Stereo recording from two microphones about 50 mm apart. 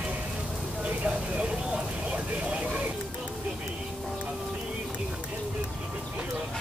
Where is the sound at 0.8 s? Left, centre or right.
Right.